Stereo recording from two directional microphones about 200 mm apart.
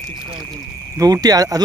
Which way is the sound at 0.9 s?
20° right (ahead or behind).